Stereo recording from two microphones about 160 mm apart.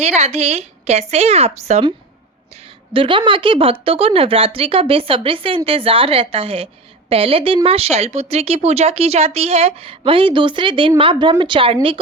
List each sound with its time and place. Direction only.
0.0 s a woman's voice: 40° right (ahead or behind)